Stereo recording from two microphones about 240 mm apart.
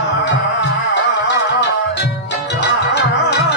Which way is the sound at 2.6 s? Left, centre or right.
Left.